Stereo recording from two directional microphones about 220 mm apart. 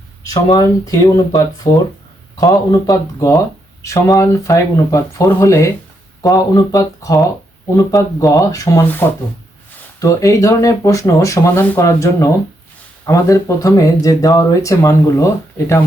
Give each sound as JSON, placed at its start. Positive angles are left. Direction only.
{"t": 0.5, "sound": "speech", "side_deg": 15}